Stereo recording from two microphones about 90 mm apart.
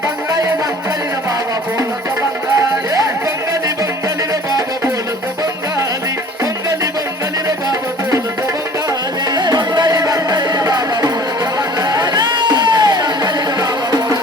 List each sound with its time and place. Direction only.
7.4 s music: 40° right (ahead or behind)
9.3 s music: 55° right (ahead or behind)